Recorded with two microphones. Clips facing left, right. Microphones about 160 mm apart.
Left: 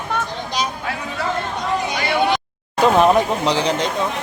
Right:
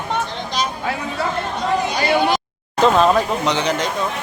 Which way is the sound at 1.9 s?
40° right (ahead or behind).